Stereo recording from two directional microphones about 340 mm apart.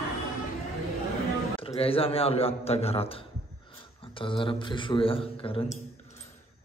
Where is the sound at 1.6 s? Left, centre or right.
Centre.